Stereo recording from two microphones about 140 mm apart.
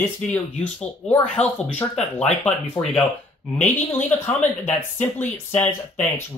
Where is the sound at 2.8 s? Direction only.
20° left (ahead or behind).